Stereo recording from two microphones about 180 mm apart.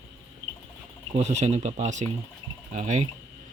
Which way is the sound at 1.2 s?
35° right (ahead or behind).